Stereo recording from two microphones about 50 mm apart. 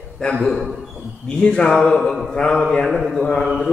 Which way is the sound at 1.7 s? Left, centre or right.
Centre.